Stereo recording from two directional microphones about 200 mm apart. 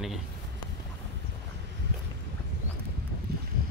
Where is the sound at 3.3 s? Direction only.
50° right (ahead or behind).